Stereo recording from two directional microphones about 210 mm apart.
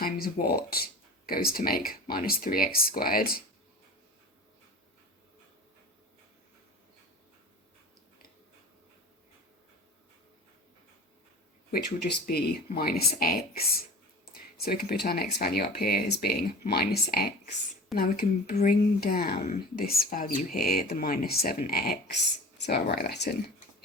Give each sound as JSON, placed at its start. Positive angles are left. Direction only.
{"t": 0.0, "sound": "speech", "side_deg": 45}
{"t": 11.7, "sound": "speech", "side_deg": 45}
{"t": 14.6, "sound": "speech", "side_deg": 45}